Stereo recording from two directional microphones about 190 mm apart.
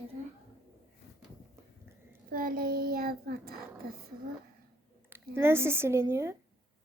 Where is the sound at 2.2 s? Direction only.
50° right (ahead or behind).